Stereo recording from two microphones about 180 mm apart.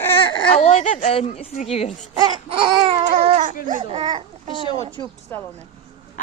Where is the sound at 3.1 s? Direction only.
40° right (ahead or behind).